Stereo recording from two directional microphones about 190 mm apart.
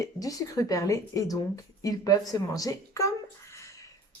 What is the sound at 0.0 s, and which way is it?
Speech, 20° left (ahead or behind).